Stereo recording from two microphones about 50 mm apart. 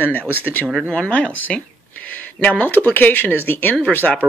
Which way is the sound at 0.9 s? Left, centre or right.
Left.